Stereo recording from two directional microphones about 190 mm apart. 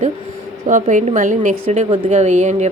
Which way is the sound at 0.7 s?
40° right (ahead or behind).